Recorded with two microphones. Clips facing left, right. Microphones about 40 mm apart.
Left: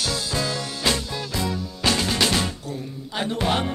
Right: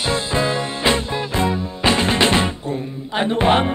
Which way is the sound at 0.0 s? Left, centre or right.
Right.